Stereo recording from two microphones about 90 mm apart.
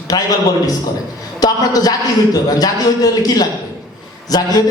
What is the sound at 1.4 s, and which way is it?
A man's voice, 45° left (ahead or behind).